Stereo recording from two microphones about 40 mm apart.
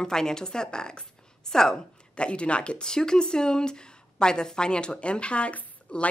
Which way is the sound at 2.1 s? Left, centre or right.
Left.